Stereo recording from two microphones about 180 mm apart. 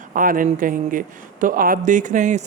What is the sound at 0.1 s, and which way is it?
Speech, 50° right (ahead or behind).